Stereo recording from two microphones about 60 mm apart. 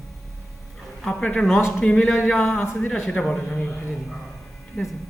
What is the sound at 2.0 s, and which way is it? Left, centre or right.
Speech, left.